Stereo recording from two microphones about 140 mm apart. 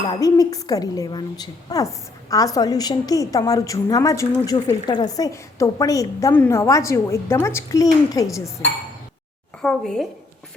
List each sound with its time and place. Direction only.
0.1 s a woman's voice: 25° left (ahead or behind)
9.6 s a woman's voice: 5° left (ahead or behind)